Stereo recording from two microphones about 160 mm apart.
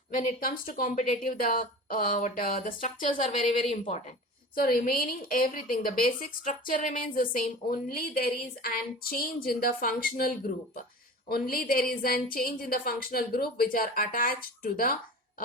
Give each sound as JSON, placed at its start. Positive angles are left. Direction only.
{"t": 0.1, "sound": "a woman's voice", "side_deg": 60}
{"t": 3.7, "sound": "a woman's voice", "side_deg": 45}
{"t": 4.5, "sound": "a woman's voice", "side_deg": 60}